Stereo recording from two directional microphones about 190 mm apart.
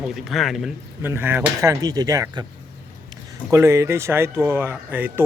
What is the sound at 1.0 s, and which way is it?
Speech, 10° right (ahead or behind).